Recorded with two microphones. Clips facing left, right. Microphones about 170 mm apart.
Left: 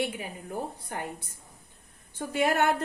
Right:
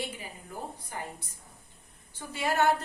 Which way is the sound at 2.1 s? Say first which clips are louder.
Left 4 dB; 55° left (ahead or behind).